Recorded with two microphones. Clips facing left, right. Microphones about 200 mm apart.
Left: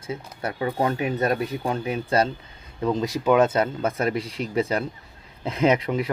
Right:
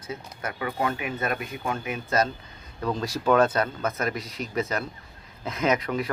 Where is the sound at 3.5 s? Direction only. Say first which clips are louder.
Left 3 dB; 25° left (ahead or behind).